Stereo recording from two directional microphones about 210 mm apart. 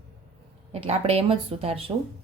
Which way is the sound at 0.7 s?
30° right (ahead or behind).